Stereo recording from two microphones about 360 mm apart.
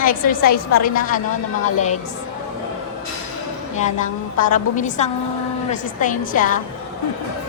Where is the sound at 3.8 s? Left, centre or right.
Centre.